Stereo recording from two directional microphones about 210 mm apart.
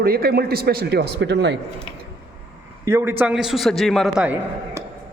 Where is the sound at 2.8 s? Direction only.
15° right (ahead or behind).